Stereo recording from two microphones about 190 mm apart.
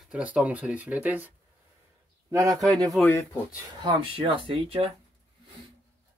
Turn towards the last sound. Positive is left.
turn(degrees=-30)  # may be behind; listen again after turning